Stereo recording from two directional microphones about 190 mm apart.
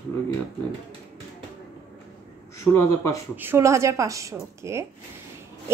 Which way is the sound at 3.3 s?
15° right (ahead or behind).